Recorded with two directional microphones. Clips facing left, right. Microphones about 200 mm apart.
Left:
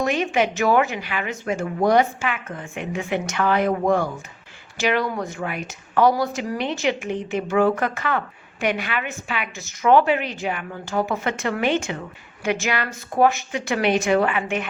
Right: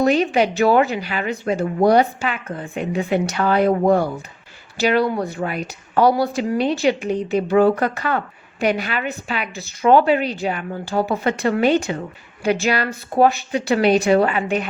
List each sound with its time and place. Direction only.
0.0 s speech: 35° right (ahead or behind)